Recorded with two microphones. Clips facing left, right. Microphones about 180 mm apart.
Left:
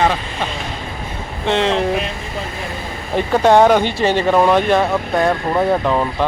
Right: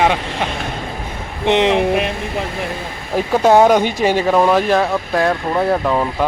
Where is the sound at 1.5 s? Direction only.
20° right (ahead or behind).